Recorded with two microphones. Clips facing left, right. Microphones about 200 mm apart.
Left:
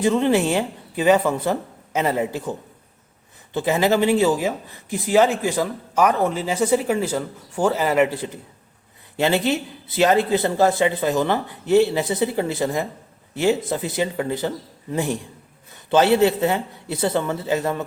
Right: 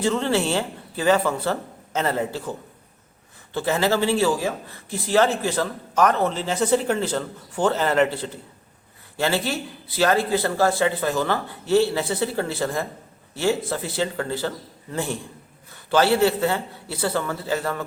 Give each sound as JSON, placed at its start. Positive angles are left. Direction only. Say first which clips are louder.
{"t": 0.0, "sound": "speech", "louder": "left 4 dB", "side_deg": 15}